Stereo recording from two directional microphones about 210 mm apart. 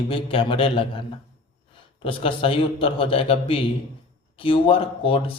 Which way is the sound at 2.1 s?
25° left (ahead or behind).